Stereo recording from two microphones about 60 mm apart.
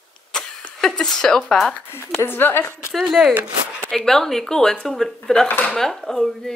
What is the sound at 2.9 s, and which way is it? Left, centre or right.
Speech, centre.